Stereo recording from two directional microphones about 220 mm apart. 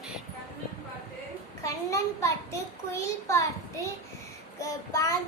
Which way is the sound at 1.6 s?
15° left (ahead or behind).